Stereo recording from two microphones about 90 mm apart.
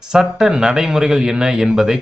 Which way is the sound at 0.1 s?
5° right (ahead or behind).